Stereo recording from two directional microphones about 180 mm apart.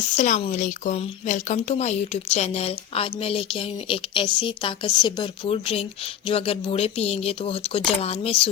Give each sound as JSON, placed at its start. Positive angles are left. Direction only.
{"t": 0.2, "sound": "speech", "side_deg": 40}